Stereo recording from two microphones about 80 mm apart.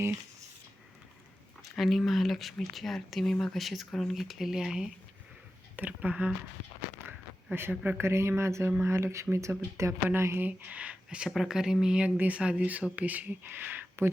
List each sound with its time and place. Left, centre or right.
1.7 s speech: centre
5.7 s speech: right
7.5 s speech: right